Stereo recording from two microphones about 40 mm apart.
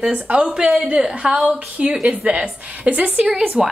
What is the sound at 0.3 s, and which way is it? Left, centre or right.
Speech, right.